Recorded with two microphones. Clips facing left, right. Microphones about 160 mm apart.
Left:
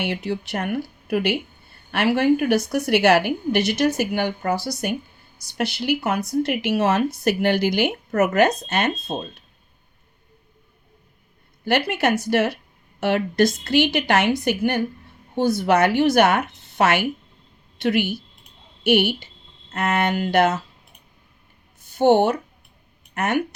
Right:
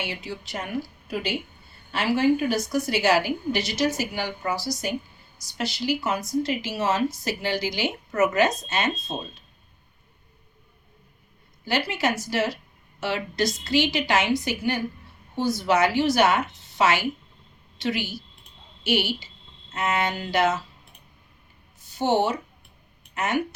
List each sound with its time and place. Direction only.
0.0 s speech: 60° left (ahead or behind)
11.6 s a woman's voice: 60° left (ahead or behind)
21.9 s speech: 55° left (ahead or behind)